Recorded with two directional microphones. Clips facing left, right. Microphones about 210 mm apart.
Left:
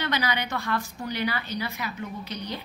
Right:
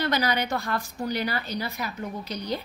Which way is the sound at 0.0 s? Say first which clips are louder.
Right 3 dB; 40° right (ahead or behind).